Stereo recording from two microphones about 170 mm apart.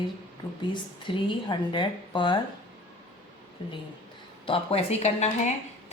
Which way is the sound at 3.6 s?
30° left (ahead or behind).